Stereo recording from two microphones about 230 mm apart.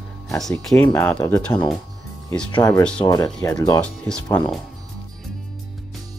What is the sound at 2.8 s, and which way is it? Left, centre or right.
Speech, centre.